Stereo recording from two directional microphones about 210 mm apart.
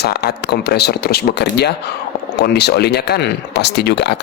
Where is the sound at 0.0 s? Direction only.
50° left (ahead or behind).